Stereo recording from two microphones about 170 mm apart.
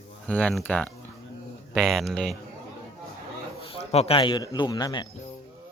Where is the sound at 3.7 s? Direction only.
35° left (ahead or behind).